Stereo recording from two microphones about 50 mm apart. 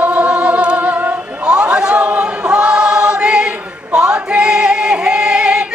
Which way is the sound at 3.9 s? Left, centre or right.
Right.